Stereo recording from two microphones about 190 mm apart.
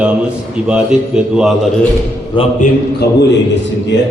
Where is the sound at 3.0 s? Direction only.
55° left (ahead or behind).